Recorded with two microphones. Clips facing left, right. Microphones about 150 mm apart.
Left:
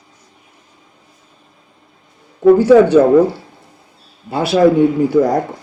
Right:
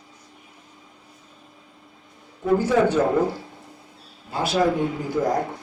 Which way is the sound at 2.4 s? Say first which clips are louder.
Left 11 dB; 75° left (ahead or behind).